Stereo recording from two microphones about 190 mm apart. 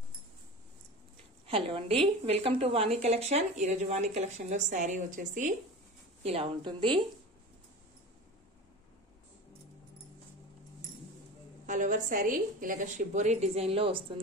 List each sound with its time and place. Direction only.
1.5 s a woman's voice: 30° right (ahead or behind)
6.2 s a woman's voice: 30° right (ahead or behind)
11.6 s a woman's voice: 40° right (ahead or behind)